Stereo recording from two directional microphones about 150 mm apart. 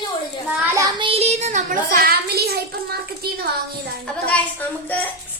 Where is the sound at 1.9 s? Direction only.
90° right.